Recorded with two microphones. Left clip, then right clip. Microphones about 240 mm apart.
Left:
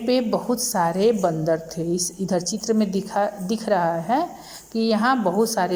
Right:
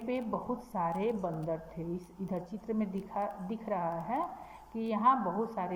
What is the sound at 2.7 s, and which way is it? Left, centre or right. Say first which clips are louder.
A woman's voice: left 13 dB; left.